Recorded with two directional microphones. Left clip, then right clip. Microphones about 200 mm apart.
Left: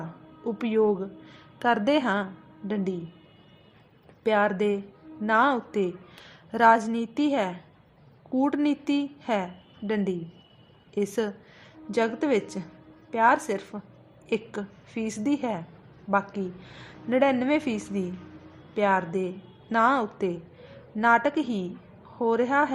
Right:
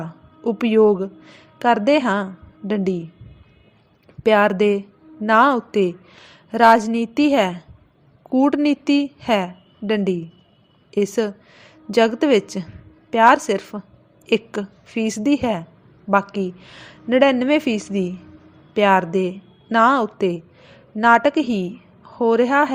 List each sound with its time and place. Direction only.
0.4 s a woman's voice: 30° right (ahead or behind)
4.2 s a woman's voice: 30° right (ahead or behind)